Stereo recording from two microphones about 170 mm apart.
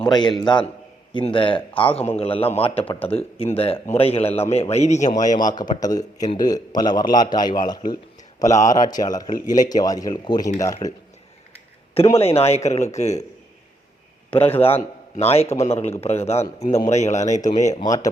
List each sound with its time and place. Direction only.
0.1 s a man's voice: 25° left (ahead or behind); by 5.1 s 45° left (ahead or behind)
5.4 s a man's voice: 25° left (ahead or behind)
10.8 s a man's voice: 40° left (ahead or behind)
12.1 s a man's voice: 35° left (ahead or behind)
14.3 s a man's voice: 35° left (ahead or behind)
17.7 s a man's voice: 20° left (ahead or behind)